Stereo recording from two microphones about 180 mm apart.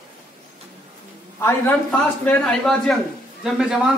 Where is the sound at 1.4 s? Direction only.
10° left (ahead or behind).